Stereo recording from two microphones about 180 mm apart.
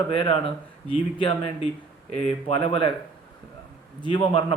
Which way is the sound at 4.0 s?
25° left (ahead or behind).